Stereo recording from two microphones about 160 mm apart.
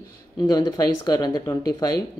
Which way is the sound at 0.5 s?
25° left (ahead or behind).